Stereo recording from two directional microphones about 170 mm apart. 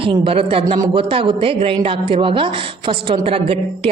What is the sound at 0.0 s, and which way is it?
A woman's voice, 30° right (ahead or behind).